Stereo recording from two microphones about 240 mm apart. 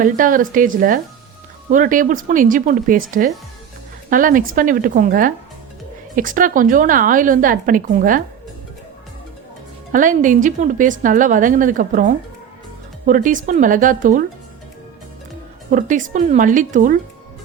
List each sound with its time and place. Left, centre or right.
0.0 s a woman's voice: right
9.9 s a woman's voice: right
15.7 s a woman's voice: right